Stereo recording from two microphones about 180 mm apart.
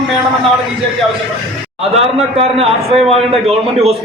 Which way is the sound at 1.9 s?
35° right (ahead or behind).